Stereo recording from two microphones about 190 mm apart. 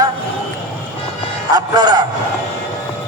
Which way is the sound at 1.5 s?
20° right (ahead or behind).